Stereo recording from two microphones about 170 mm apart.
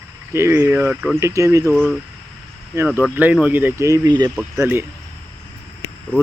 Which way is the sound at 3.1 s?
10° right (ahead or behind).